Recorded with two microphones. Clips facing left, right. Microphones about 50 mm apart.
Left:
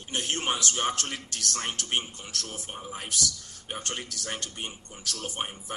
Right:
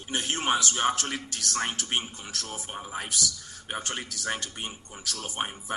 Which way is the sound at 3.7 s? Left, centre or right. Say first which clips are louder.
Right 2 dB; right.